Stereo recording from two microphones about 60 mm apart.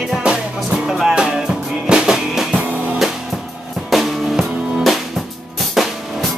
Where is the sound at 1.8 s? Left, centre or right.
Centre.